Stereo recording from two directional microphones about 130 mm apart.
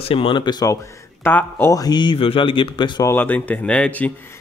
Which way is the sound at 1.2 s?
15° left (ahead or behind).